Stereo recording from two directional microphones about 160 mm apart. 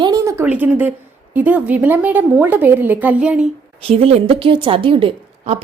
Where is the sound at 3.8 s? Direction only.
35° right (ahead or behind).